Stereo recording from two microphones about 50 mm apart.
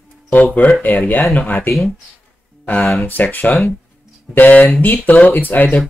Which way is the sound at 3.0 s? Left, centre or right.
Left.